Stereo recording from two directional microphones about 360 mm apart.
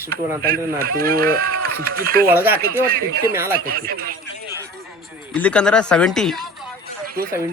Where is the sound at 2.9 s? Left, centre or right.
Right.